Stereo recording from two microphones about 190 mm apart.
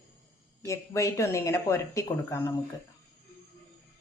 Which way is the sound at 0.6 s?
15° left (ahead or behind).